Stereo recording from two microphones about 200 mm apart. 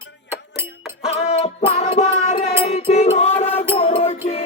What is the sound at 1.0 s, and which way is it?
Music, 30° left (ahead or behind).